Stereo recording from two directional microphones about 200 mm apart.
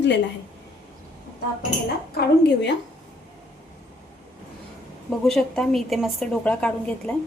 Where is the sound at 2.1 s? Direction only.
55° left (ahead or behind).